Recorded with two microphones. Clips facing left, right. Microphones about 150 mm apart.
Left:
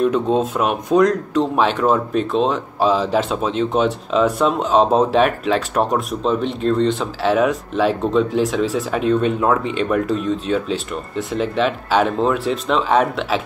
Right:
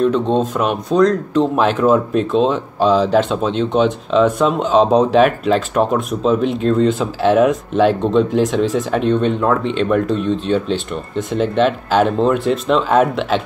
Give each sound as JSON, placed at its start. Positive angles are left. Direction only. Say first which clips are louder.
{"t": 0.0, "sound": "speech", "louder": "right 2 dB", "side_deg": 5}